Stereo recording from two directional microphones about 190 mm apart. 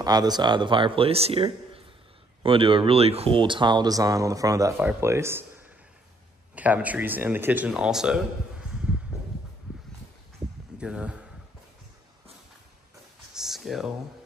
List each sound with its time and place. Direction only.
0.0 s speech: 20° right (ahead or behind)
6.5 s speech: 10° right (ahead or behind)
10.8 s speech: 5° right (ahead or behind)
13.3 s a sound: centre (ahead or behind)